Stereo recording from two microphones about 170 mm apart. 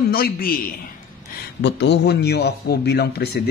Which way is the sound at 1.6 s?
90° left.